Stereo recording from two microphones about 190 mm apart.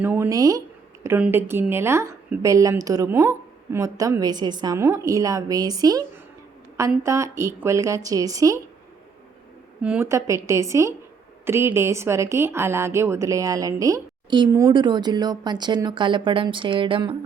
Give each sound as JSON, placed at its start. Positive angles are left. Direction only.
{"t": 0.0, "sound": "a woman's voice", "side_deg": -10}
{"t": 9.8, "sound": "a woman's voice", "side_deg": -10}